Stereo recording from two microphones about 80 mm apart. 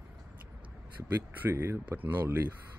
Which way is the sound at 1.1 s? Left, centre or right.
Right.